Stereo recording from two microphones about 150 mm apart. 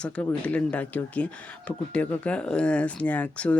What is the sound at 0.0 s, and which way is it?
Speech, 10° left (ahead or behind).